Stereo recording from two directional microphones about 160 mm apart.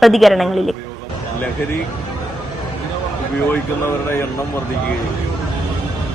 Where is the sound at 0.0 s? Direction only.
Centre (ahead or behind).